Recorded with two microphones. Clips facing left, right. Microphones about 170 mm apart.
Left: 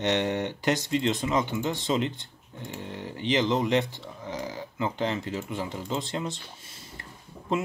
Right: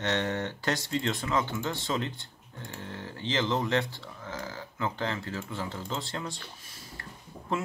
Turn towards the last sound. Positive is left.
turn(degrees=20)  # may be behind; listen again after turning